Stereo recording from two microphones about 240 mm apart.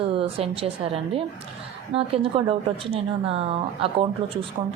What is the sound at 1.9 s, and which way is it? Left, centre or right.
A woman's voice, right.